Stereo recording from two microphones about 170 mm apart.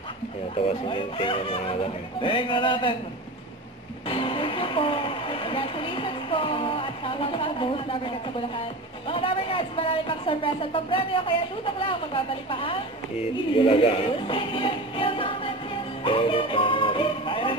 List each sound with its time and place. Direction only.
0.8 s a man's voice: 30° left (ahead or behind)
4.1 s speech: 30° left (ahead or behind)
16.0 s music: 30° left (ahead or behind)